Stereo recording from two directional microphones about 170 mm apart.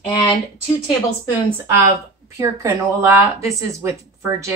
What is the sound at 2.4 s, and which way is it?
A woman's voice, 15° right (ahead or behind).